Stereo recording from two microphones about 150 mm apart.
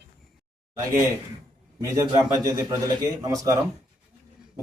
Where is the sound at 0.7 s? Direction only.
20° right (ahead or behind).